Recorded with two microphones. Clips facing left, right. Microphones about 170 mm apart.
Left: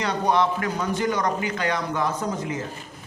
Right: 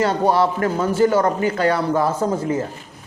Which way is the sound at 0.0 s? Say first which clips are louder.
Right 5 dB; 45° right (ahead or behind).